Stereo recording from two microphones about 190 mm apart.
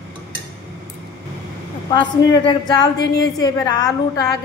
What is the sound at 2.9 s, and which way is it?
Speech, 60° left (ahead or behind).